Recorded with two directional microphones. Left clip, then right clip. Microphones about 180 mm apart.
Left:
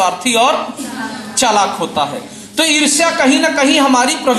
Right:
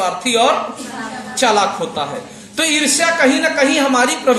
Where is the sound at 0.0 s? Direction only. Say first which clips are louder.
Left 2 dB; 15° right (ahead or behind).